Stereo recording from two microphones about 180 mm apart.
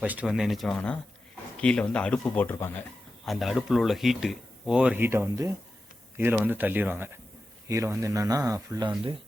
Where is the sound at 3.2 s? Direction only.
Centre (ahead or behind).